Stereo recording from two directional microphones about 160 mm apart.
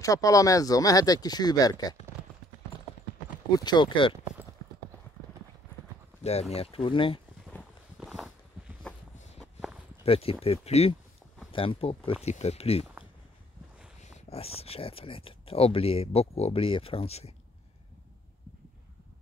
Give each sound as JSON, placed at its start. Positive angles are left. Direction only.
{"t": 0.0, "sound": "speech", "side_deg": 20}
{"t": 3.5, "sound": "speech", "side_deg": 25}
{"t": 6.5, "sound": "speech", "side_deg": 35}
{"t": 8.0, "sound": "a sound", "side_deg": 0}
{"t": 9.4, "sound": "walk", "side_deg": 0}
{"t": 10.0, "sound": "speech", "side_deg": 35}
{"t": 14.3, "sound": "speech", "side_deg": 40}